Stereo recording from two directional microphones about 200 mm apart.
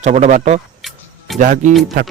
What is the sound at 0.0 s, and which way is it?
Speech, 35° right (ahead or behind).